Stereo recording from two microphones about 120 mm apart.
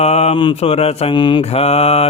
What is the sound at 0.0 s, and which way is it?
Mantra, 60° left (ahead or behind).